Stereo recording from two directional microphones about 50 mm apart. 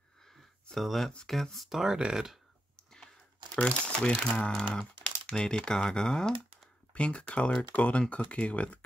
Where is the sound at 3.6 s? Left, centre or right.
Centre.